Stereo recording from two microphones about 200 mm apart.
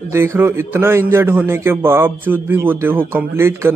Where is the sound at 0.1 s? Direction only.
10° right (ahead or behind).